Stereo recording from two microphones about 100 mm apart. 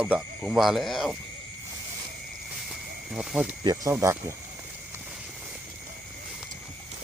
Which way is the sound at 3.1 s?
5° right (ahead or behind).